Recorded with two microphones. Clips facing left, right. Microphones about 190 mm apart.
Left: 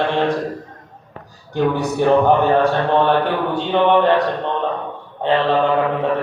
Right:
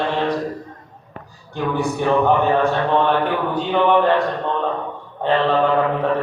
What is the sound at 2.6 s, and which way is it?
Speech, 35° left (ahead or behind).